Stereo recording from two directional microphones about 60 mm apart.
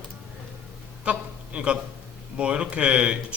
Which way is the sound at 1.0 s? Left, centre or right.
Centre.